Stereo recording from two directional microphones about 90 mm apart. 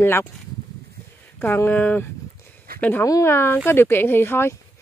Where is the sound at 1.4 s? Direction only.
20° left (ahead or behind).